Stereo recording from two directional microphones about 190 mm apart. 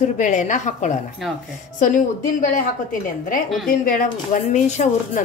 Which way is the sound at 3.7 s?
45° left (ahead or behind).